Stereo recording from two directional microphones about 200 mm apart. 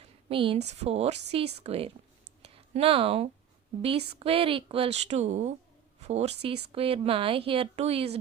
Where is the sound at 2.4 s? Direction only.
30° right (ahead or behind).